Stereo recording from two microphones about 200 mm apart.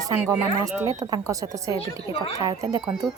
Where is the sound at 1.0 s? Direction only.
15° right (ahead or behind).